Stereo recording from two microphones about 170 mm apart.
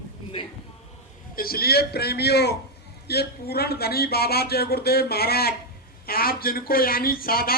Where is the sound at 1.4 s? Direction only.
60° left (ahead or behind).